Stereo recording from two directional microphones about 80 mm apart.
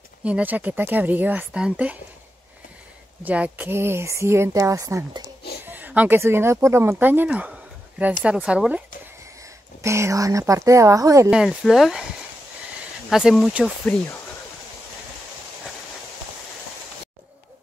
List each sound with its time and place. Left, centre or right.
0.2 s speech: centre
3.3 s speech: centre; by 5.0 s right
5.7 s speech: right
9.8 s speech: right
11.2 s speech: centre
13.1 s speech: centre